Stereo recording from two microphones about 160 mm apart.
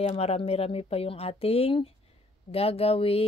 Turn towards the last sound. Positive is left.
turn(degrees=35)  # may be behind; listen again after turning